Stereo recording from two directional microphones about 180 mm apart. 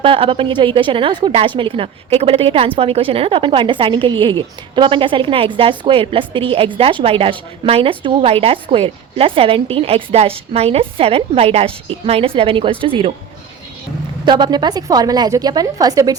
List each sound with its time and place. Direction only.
0.0 s a woman's voice: 30° right (ahead or behind)
14.3 s a woman's voice: 25° right (ahead or behind)